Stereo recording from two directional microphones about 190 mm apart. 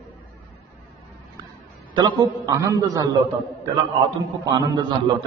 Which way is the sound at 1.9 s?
20° right (ahead or behind).